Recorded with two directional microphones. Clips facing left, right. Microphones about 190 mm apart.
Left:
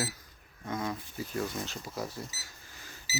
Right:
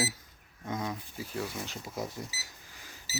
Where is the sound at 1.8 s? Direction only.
20° right (ahead or behind).